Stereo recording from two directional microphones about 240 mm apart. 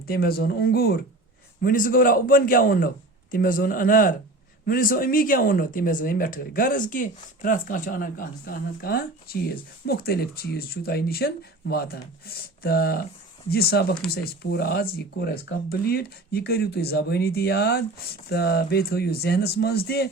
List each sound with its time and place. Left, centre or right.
0.0 s speech: left